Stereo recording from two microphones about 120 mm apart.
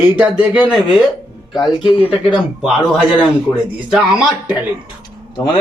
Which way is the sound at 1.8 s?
55° left (ahead or behind).